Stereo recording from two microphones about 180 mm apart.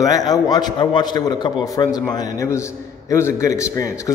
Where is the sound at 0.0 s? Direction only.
20° left (ahead or behind).